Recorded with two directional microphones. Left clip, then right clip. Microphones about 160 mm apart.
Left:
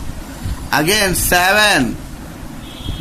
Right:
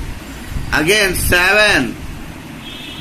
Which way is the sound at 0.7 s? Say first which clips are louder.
Right 1 dB; 90° left.